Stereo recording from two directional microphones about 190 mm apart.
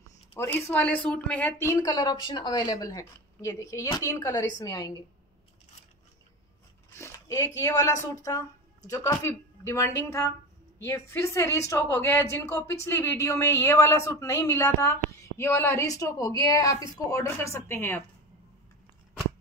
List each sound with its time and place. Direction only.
0.7 s a woman's voice: 5° left (ahead or behind)
1.7 s a woman's voice: 20° left (ahead or behind)
6.9 s a woman's voice: 15° left (ahead or behind)